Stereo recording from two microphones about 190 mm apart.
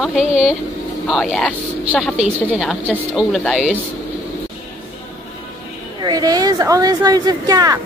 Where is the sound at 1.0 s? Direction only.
Centre (ahead or behind).